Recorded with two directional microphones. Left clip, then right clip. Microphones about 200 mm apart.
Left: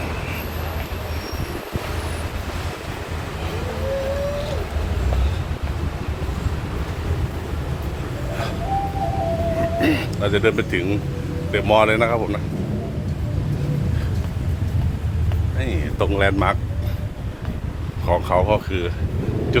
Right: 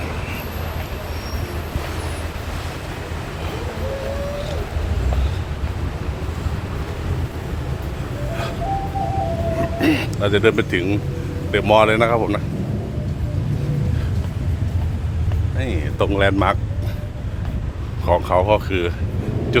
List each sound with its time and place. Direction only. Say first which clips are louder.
9.6 s vehicle: right 2 dB; 10° right (ahead or behind)
11.5 s speech: right 2 dB; 10° right (ahead or behind)
15.6 s a sound: right 2 dB; 10° right (ahead or behind)
18.0 s speech: right 2 dB; 10° right (ahead or behind)